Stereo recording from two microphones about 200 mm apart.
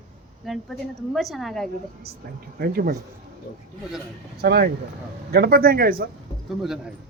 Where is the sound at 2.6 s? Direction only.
50° right (ahead or behind).